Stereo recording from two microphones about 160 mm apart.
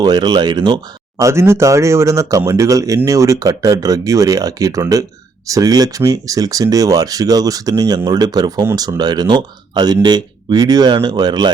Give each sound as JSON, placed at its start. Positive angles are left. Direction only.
{"t": 0.0, "sound": "speech", "side_deg": -25}
{"t": 1.2, "sound": "speech", "side_deg": -15}